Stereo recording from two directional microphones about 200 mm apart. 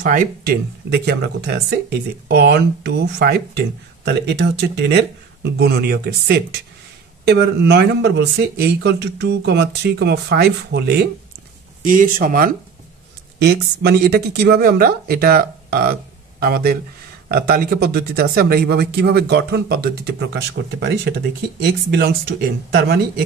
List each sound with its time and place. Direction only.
0.0 s speech: 45° right (ahead or behind)
11.8 s speech: 40° right (ahead or behind)